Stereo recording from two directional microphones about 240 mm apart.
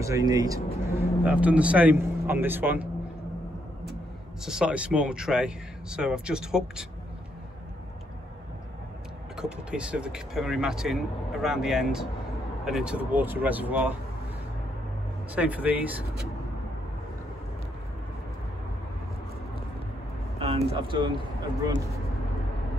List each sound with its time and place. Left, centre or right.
0.0 s speech: centre
4.5 s speech: centre
9.4 s speech: centre
15.3 s speech: centre
20.3 s speech: right